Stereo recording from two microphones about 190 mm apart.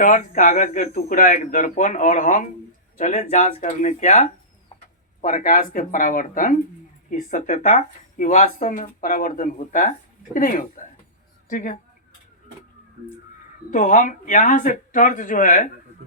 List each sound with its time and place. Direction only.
0.0 s a woman's voice: 45° left (ahead or behind)
13.7 s speech: 45° left (ahead or behind)